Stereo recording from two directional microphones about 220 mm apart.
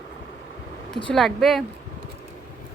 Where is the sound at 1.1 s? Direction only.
Centre (ahead or behind).